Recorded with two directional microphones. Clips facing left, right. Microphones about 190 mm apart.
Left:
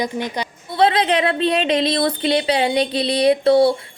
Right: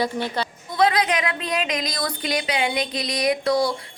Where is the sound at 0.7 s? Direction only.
30° left (ahead or behind).